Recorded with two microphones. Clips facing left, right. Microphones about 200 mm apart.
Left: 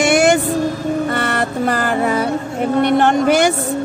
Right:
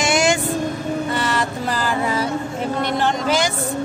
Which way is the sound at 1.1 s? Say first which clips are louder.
Left 3 dB; 60° left (ahead or behind).